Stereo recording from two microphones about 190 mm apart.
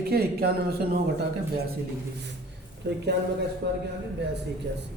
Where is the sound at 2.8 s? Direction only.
70° right (ahead or behind).